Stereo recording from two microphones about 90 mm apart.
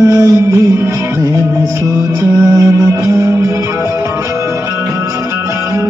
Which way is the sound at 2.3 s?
35° right (ahead or behind).